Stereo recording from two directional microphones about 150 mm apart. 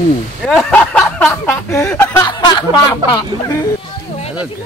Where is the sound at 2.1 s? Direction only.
30° left (ahead or behind).